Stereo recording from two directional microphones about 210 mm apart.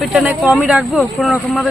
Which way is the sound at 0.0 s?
Centre (ahead or behind).